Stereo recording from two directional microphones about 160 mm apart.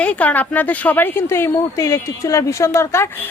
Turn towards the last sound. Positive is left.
turn(degrees=15)  # may be behind; listen again after turning